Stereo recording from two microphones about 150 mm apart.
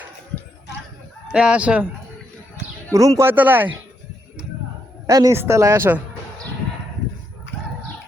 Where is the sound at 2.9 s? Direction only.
20° right (ahead or behind).